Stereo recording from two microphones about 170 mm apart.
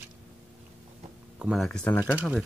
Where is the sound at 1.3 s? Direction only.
5° right (ahead or behind).